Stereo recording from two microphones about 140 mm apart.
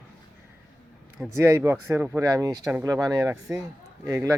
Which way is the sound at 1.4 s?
20° right (ahead or behind).